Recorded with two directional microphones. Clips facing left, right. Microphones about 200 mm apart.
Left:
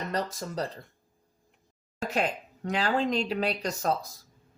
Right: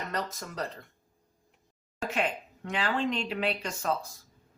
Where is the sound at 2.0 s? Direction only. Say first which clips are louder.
Left 2 dB; 40° left (ahead or behind).